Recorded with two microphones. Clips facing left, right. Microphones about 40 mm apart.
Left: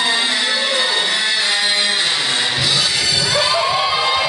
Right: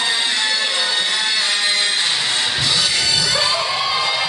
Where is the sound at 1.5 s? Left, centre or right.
Centre.